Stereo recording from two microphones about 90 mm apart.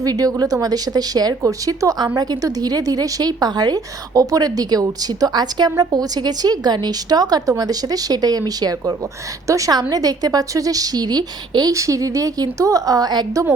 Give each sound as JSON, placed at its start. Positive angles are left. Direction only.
{"t": 0.0, "sound": "a woman's voice", "side_deg": -40}